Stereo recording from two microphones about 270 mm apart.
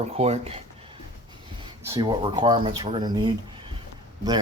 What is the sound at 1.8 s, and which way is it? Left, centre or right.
Speech, centre.